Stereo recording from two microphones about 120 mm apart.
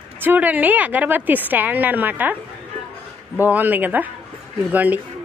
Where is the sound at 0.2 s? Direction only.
15° right (ahead or behind).